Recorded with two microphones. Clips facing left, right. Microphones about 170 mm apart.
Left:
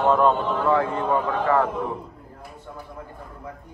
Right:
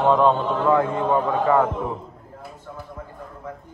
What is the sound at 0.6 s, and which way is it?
Speech, 20° right (ahead or behind).